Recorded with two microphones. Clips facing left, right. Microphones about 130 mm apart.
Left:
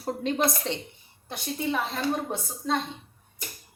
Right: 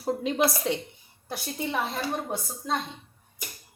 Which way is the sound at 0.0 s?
5° right (ahead or behind).